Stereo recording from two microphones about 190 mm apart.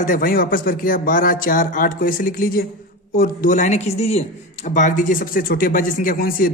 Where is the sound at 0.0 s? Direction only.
45° left (ahead or behind).